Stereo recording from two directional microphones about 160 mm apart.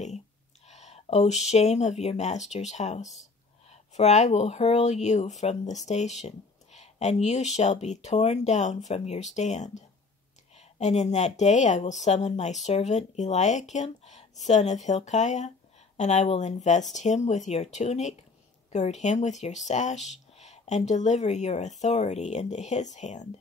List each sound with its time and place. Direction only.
0.7 s speech: 45° left (ahead or behind)